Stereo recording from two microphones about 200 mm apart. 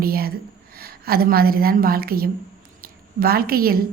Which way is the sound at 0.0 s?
50° right (ahead or behind).